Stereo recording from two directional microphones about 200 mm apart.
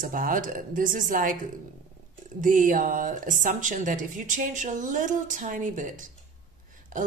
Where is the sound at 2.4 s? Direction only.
40° right (ahead or behind).